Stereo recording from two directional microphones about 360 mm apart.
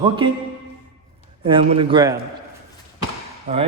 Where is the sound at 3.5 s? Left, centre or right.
Right.